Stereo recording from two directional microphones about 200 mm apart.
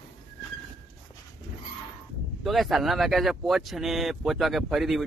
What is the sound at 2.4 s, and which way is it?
Speech, centre (ahead or behind).